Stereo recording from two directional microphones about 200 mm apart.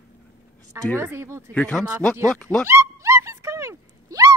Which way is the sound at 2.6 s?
15° right (ahead or behind).